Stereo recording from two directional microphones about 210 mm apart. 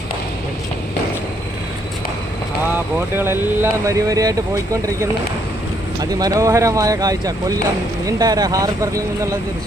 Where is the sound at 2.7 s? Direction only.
10° right (ahead or behind).